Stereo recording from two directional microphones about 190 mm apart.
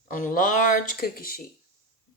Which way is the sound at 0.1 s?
45° left (ahead or behind).